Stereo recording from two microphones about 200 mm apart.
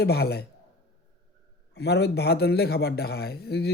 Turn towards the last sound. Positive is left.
turn(degrees=55)  # may be behind; listen again after turning